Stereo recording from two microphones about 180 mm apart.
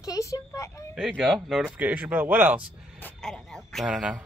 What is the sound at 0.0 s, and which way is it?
Speech, 20° left (ahead or behind).